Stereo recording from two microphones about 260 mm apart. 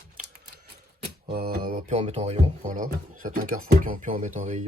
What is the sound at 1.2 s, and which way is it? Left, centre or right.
Speech, right.